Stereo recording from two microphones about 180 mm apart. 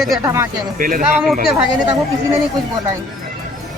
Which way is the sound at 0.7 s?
50° right (ahead or behind).